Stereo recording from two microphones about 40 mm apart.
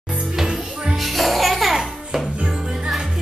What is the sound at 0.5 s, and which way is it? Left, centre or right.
Music, right.